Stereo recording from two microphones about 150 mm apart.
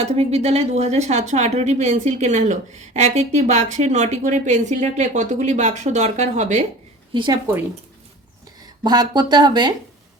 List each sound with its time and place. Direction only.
0.0 s a woman's voice: 45° right (ahead or behind)
7.1 s speech: 30° right (ahead or behind)
8.8 s speech: 30° right (ahead or behind)